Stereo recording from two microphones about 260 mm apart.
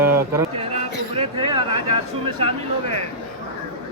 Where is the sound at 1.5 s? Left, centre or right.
Centre.